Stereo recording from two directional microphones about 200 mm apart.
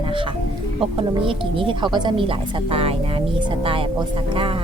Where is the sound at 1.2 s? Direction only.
25° right (ahead or behind).